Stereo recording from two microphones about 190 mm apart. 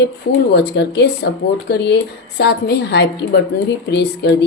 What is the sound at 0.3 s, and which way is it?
Speech, 65° left (ahead or behind).